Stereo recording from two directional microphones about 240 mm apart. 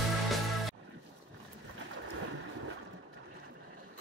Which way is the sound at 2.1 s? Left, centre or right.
Right.